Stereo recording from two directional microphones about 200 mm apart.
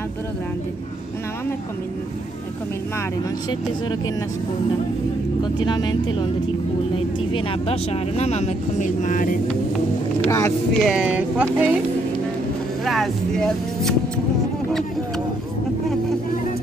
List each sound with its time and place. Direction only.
5.4 s speech: 20° left (ahead or behind)
7.3 s speech: 30° left (ahead or behind)
10.2 s speech: 15° left (ahead or behind)
10.7 s speech: centre (ahead or behind)
12.8 s speech: centre (ahead or behind)